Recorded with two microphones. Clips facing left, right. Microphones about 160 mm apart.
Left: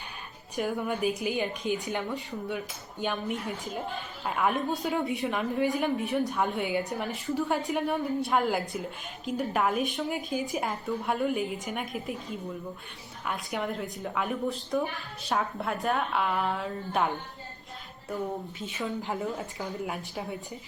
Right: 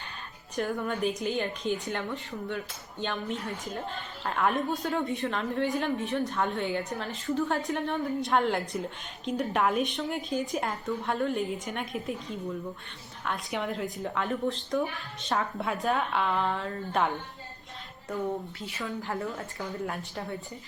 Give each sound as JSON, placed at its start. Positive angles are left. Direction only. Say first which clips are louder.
{"t": 0.5, "sound": "a woman's voice", "louder": "left 1 dB", "side_deg": 10}
{"t": 13.2, "sound": "a woman's voice", "louder": "even", "side_deg": 0}
{"t": 18.6, "sound": "speech", "louder": "left 2 dB", "side_deg": 20}
{"t": 19.5, "sound": "a woman's voice", "louder": "even", "side_deg": 5}